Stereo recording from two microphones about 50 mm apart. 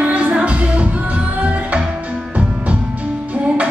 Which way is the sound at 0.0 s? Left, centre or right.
Right.